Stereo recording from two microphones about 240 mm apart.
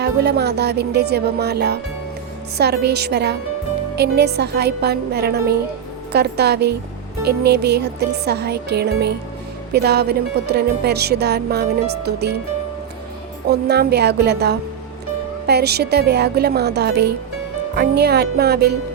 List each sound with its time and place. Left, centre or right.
0.0 s music: right
13.5 s music: right